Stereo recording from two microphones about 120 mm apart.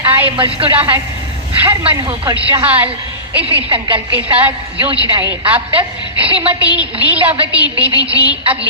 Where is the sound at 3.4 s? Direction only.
50° right (ahead or behind).